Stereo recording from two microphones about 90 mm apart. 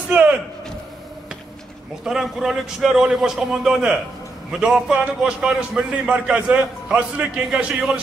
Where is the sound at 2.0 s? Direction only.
5° right (ahead or behind).